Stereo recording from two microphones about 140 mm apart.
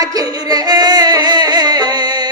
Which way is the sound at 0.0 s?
25° right (ahead or behind).